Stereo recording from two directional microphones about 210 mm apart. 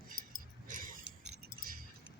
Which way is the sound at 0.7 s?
40° right (ahead or behind).